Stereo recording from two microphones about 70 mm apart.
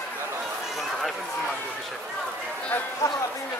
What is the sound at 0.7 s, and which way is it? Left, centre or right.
Run, centre.